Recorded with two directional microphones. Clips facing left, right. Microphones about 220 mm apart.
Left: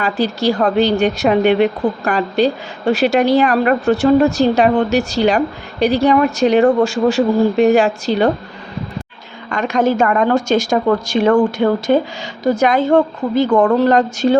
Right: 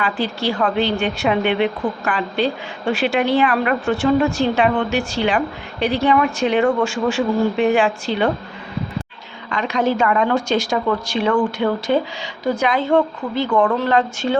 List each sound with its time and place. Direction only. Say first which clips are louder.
0.0 s a woman's voice: left 5 dB; 40° left (ahead or behind)
9.5 s a woman's voice: left 4 dB; 45° left (ahead or behind)